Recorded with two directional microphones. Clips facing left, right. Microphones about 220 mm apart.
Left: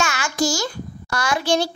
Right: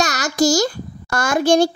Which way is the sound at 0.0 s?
40° right (ahead or behind).